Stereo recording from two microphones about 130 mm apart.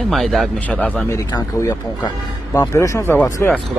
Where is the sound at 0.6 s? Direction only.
10° left (ahead or behind).